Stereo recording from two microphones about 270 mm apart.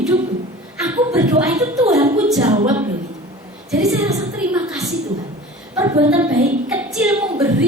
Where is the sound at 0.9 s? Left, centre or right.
Centre.